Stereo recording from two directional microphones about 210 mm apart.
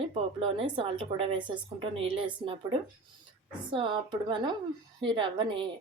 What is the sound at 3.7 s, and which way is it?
Speech, 25° right (ahead or behind).